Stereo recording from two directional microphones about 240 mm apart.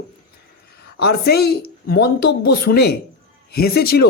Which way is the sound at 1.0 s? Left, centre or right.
Left.